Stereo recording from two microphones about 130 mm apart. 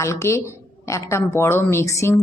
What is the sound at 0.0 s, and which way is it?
Speech, 20° left (ahead or behind).